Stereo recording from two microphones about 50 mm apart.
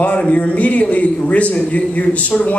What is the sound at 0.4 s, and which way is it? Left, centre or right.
A man's voice, left.